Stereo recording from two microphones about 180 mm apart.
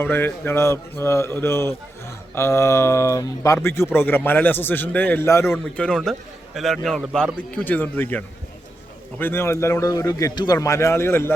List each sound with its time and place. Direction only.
0.0 s a man's voice: 10° left (ahead or behind)